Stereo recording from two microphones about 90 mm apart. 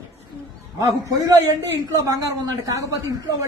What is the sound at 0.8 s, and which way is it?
A man's voice, 40° right (ahead or behind).